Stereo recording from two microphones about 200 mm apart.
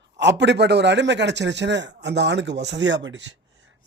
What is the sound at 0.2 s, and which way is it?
A man's voice, 60° right (ahead or behind).